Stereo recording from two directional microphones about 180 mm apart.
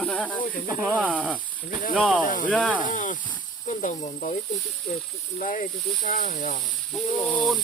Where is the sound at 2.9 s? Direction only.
45° left (ahead or behind).